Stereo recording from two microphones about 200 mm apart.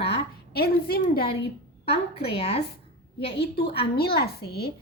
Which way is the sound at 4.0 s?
50° left (ahead or behind).